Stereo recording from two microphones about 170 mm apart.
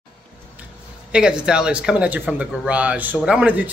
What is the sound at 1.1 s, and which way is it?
A woman's voice, 5° right (ahead or behind).